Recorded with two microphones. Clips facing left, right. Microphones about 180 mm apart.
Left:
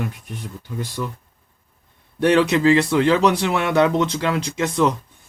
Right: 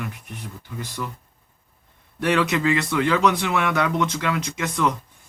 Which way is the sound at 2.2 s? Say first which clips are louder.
Left 5 dB; 35° left (ahead or behind).